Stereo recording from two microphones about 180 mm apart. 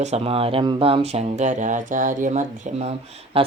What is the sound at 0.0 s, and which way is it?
Speech, 35° right (ahead or behind).